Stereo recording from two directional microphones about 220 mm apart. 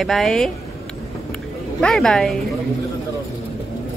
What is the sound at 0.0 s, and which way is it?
Speech, centre (ahead or behind).